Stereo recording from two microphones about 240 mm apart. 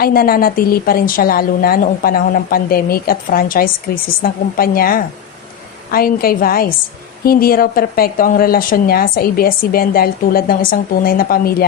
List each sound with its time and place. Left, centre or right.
0.0 s a woman's voice: left